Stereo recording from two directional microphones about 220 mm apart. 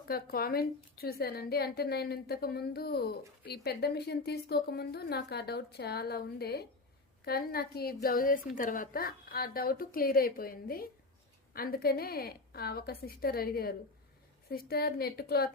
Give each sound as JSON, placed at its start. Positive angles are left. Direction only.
{"t": 0.1, "sound": "a woman's voice", "side_deg": 45}